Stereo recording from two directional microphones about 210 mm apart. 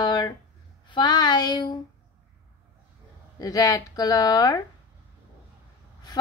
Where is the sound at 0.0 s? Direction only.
20° left (ahead or behind).